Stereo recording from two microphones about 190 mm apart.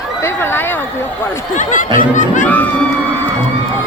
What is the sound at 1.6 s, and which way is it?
Speech, 45° left (ahead or behind).